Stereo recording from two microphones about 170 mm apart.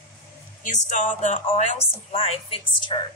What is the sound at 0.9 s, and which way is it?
A woman's voice, 45° left (ahead or behind).